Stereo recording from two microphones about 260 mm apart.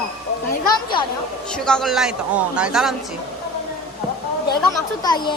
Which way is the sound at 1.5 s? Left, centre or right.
Centre.